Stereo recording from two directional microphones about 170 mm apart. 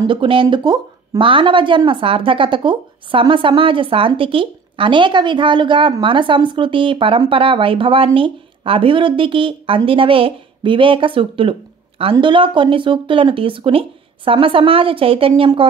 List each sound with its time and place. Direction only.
0.0 s speech: 30° right (ahead or behind)